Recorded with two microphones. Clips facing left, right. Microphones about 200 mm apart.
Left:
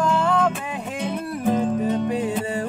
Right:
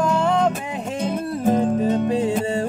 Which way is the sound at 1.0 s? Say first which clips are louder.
Right 3 dB; 45° right (ahead or behind).